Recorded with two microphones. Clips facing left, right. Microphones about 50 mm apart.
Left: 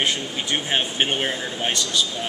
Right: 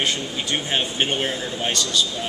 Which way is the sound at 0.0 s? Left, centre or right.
Left.